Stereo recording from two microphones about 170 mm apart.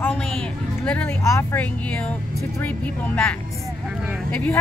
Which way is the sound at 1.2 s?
15° left (ahead or behind).